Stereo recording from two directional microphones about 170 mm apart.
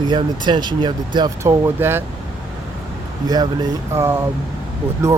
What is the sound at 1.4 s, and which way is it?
Speech, 15° right (ahead or behind).